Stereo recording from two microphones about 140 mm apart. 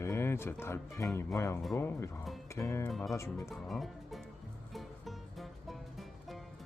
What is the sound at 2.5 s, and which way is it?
Music, 20° left (ahead or behind).